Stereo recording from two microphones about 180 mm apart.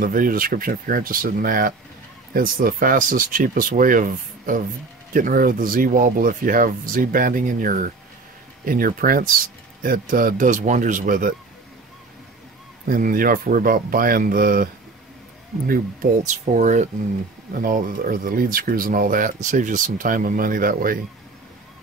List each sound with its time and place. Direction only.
0.0 s speech: 50° right (ahead or behind)
12.8 s speech: 50° right (ahead or behind)